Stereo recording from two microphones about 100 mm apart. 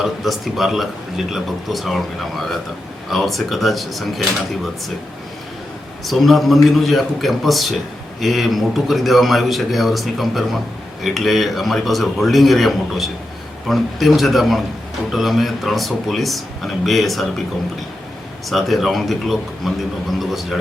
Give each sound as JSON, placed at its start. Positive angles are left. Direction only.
{"t": 0.0, "sound": "speech", "side_deg": 0}
{"t": 6.1, "sound": "speech", "side_deg": 0}
{"t": 18.4, "sound": "speech", "side_deg": 0}